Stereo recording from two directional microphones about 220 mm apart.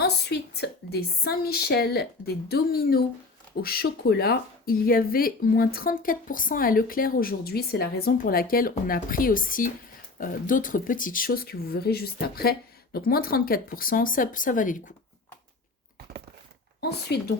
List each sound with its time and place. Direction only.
0.0 s a woman's voice: 50° left (ahead or behind)
17.1 s speech: 50° left (ahead or behind)